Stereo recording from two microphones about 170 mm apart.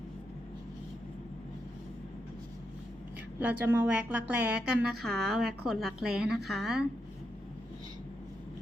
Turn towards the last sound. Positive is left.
turn(degrees=0)  # may be behind; listen again after turning